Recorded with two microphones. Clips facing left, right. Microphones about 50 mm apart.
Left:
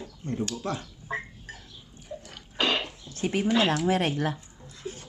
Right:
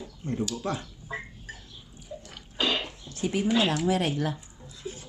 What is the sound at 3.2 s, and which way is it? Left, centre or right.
Speech, left.